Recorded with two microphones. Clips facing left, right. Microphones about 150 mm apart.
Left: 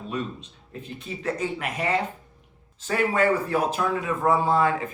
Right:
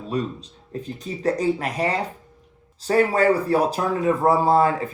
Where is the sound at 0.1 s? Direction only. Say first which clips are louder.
Right 6 dB; 35° right (ahead or behind).